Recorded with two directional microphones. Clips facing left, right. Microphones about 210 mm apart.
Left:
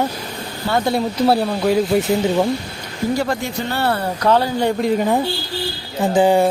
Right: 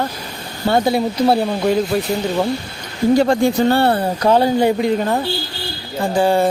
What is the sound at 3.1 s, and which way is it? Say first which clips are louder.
Speech: right 9 dB; 25° right (ahead or behind).